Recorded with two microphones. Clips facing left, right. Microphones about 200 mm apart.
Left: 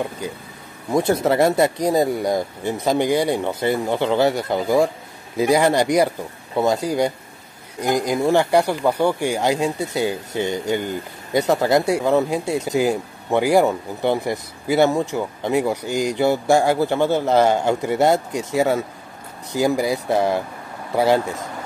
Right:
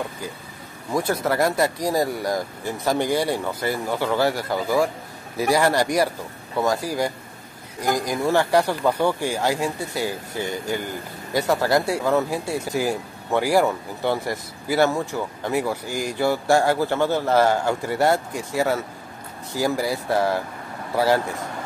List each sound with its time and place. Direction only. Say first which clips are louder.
0.9 s speech: left 5 dB; 25° left (ahead or behind)